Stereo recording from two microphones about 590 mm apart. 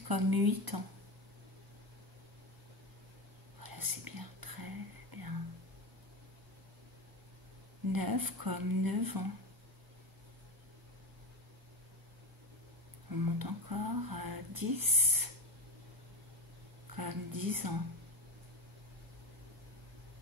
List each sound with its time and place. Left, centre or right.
0.1 s speech: right
3.6 s whispering: right
7.9 s speech: right
13.1 s speech: right
16.9 s speech: right